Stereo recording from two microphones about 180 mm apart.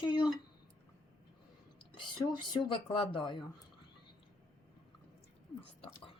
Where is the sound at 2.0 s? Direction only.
25° left (ahead or behind).